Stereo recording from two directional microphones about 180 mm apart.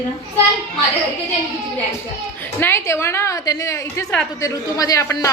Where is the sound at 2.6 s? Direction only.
15° left (ahead or behind).